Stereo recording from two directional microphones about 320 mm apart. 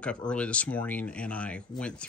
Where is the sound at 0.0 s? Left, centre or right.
Centre.